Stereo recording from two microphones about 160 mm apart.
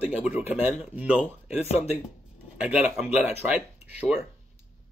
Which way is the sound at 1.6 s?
40° left (ahead or behind).